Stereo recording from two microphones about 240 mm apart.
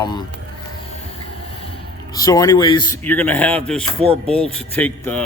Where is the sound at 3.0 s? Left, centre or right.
Centre.